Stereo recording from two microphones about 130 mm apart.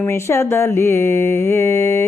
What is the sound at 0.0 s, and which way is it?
Mantra, 20° left (ahead or behind).